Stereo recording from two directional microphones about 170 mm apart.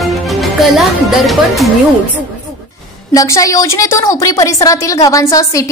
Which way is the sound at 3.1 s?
20° left (ahead or behind).